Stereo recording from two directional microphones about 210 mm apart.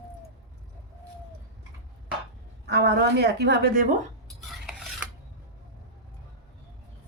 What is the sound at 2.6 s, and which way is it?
A woman's voice, 50° right (ahead or behind).